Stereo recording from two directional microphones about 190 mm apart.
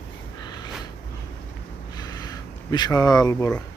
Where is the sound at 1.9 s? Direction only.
20° left (ahead or behind).